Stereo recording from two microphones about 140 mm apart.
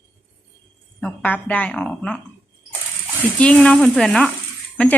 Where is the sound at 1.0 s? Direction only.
10° left (ahead or behind).